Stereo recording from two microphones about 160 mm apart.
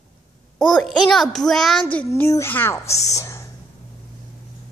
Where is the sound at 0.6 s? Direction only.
Centre (ahead or behind); by 3.5 s 20° left (ahead or behind).